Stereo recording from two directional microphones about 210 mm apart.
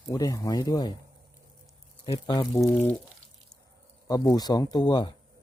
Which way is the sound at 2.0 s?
20° left (ahead or behind).